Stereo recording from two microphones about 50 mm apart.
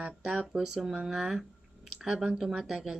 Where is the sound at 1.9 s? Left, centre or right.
Centre.